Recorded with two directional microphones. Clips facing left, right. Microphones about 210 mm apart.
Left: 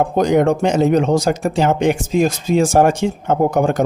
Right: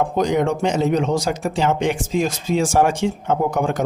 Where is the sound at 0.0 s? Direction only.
50° left (ahead or behind).